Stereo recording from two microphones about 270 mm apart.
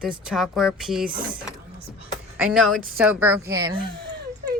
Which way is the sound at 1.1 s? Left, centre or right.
Right.